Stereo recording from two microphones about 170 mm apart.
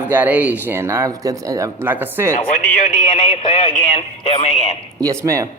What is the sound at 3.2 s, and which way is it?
Speech, 30° left (ahead or behind).